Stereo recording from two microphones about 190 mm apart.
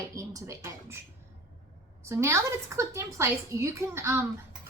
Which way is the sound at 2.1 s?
15° right (ahead or behind).